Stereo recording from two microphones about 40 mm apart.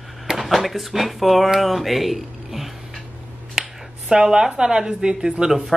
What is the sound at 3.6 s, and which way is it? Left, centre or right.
Speech, centre.